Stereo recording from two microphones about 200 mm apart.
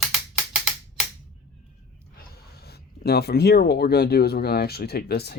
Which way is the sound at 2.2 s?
50° left (ahead or behind).